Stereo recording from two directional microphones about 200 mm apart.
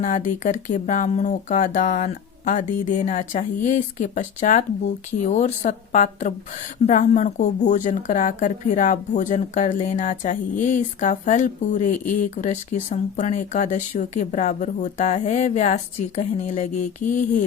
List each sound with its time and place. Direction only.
0.0 s speech: 40° left (ahead or behind)